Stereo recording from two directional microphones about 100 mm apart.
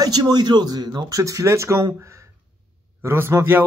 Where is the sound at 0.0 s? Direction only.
45° right (ahead or behind).